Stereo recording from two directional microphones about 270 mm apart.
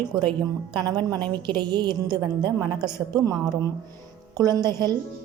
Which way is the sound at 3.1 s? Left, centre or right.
Centre.